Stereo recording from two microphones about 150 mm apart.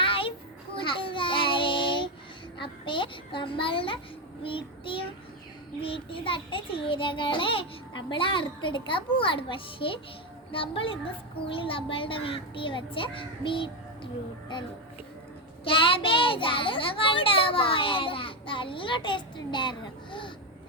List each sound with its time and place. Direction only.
0.0 s children playing: 35° left (ahead or behind)
0.8 s child singing: 35° left (ahead or behind)
2.6 s a sound: 35° left (ahead or behind)
4.4 s a child's voice: 35° left (ahead or behind)
15.6 s a child's voice: 35° left (ahead or behind)